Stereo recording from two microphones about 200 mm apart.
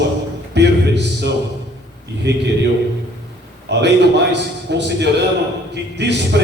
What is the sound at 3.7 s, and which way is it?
A man's voice, 60° right (ahead or behind).